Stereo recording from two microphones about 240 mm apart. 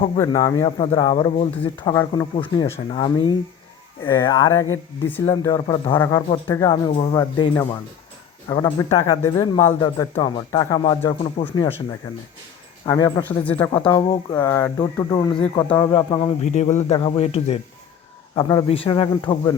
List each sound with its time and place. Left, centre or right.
0.2 s a man's voice: centre
12.8 s speech: centre
16.5 s a man's voice: left